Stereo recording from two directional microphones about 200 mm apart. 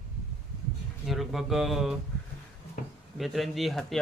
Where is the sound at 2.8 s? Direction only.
45° left (ahead or behind).